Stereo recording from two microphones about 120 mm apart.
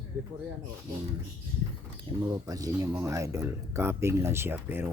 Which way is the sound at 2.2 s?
35° right (ahead or behind).